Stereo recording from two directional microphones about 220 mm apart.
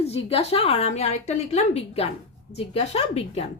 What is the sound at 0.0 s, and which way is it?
A woman's voice, 25° left (ahead or behind).